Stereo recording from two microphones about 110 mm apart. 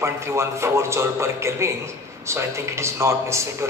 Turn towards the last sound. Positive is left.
turn(degrees=-25)  # may be behind; listen again after turning